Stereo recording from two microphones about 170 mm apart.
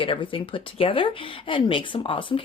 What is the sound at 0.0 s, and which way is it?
Speech, 30° left (ahead or behind).